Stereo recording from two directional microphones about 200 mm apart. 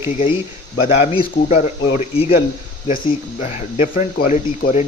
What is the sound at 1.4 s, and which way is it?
Speech, 40° left (ahead or behind).